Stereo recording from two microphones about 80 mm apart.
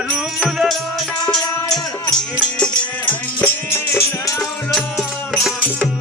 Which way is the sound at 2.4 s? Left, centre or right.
Centre.